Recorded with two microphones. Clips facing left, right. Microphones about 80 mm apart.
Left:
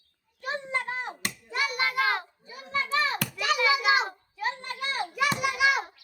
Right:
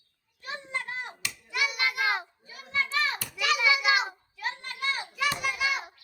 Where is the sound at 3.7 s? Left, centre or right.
Left.